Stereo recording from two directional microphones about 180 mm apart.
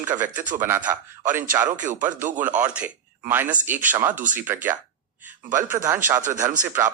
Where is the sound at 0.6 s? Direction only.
10° right (ahead or behind).